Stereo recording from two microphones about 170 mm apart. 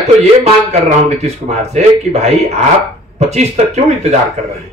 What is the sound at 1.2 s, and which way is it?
Speech, 40° right (ahead or behind).